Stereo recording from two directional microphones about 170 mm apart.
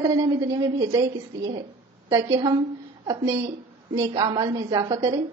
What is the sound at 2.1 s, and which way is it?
A woman's voice, 25° right (ahead or behind).